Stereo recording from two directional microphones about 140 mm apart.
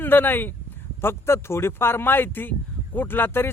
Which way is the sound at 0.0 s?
15° left (ahead or behind).